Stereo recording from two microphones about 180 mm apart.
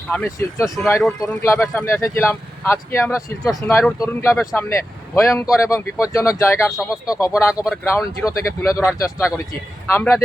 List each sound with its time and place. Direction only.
0.1 s speech: 10° left (ahead or behind)